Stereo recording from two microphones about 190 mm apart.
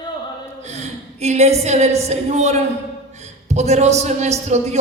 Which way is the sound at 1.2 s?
35° right (ahead or behind).